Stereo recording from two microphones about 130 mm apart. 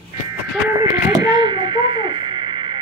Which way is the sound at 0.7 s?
30° right (ahead or behind).